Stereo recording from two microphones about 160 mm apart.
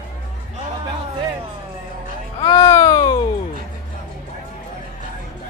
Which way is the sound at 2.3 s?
30° left (ahead or behind).